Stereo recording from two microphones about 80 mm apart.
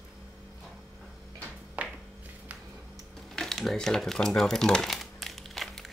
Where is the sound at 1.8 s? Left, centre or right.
Centre.